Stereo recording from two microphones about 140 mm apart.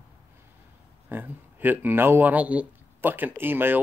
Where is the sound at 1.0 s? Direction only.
15° right (ahead or behind).